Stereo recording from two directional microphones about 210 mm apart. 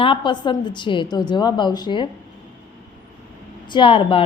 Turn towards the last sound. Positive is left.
turn(degrees=25)  # may be behind; listen again after turning